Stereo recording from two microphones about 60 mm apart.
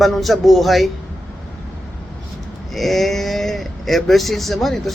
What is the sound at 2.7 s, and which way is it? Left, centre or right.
Speech, centre.